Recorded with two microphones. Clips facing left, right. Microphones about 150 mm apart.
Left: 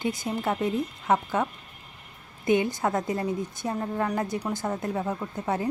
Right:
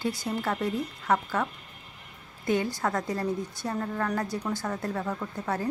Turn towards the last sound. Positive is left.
turn(degrees=20)  # may be behind; listen again after turning